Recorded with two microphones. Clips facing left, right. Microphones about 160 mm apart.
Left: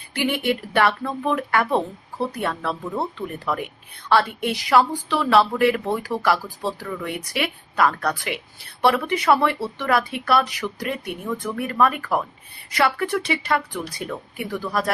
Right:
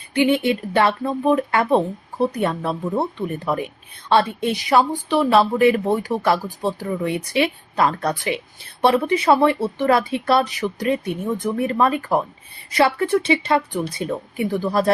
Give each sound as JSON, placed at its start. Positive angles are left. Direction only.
{"t": 0.2, "sound": "a woman's voice", "side_deg": -20}